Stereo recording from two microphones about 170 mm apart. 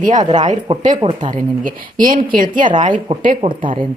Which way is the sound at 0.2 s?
25° right (ahead or behind).